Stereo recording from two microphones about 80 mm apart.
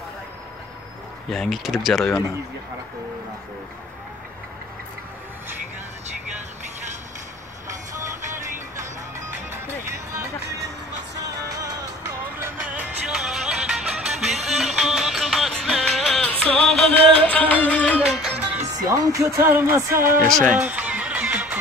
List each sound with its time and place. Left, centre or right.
1.3 s speech: centre
11.4 s music: right
12.6 s music: centre
16.2 s music: centre
17.9 s music: centre
18.9 s speech: right
20.5 s music: centre